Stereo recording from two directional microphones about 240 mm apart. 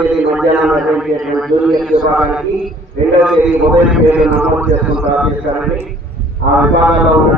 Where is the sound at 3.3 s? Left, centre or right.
Centre.